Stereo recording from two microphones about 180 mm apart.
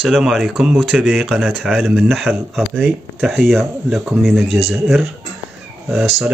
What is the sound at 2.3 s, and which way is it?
Speech, 10° right (ahead or behind).